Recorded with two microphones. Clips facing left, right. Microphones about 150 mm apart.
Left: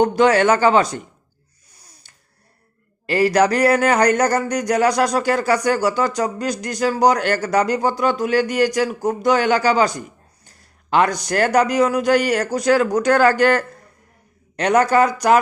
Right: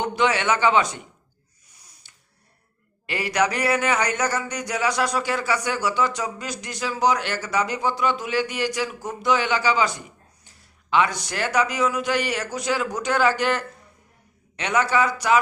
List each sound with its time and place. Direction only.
0.0 s a man's voice: 40° left (ahead or behind)
1.8 s a sound: 35° left (ahead or behind)
3.1 s a man's voice: 35° left (ahead or behind)